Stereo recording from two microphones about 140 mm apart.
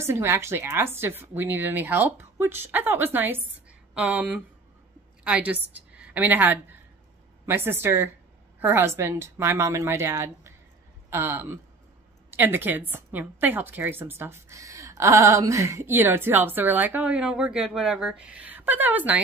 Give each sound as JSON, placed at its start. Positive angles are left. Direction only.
{"t": 0.0, "sound": "a woman's voice", "side_deg": -20}